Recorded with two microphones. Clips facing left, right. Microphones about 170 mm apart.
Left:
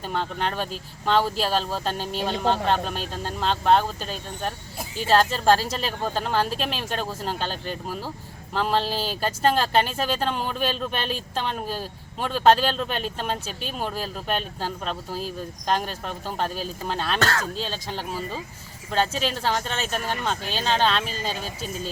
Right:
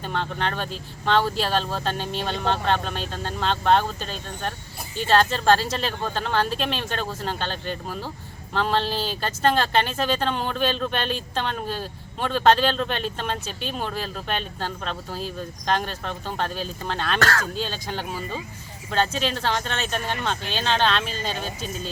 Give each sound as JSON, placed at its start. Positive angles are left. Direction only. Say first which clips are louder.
{"t": 0.0, "sound": "speech", "louder": "even", "side_deg": 5}
{"t": 17.2, "sound": "speech", "louder": "right 2 dB", "side_deg": 20}
{"t": 17.4, "sound": "speech", "louder": "right 1 dB", "side_deg": 0}